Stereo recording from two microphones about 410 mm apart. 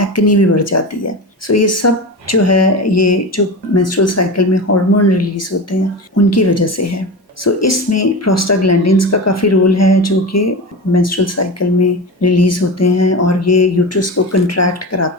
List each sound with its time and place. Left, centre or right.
0.0 s speech: left
6.3 s speech: left